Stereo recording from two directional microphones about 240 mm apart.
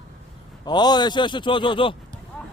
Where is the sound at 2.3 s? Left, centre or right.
Centre.